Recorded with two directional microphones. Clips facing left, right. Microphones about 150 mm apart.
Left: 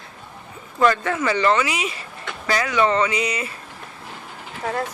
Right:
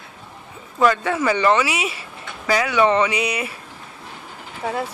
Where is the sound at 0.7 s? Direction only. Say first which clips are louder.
Right 1 dB; 10° right (ahead or behind).